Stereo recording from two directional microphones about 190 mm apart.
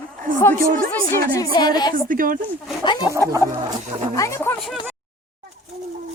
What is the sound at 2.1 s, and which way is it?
Speech, 45° right (ahead or behind).